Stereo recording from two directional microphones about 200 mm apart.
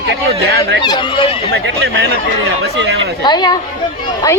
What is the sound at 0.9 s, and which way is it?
Speech, 25° left (ahead or behind).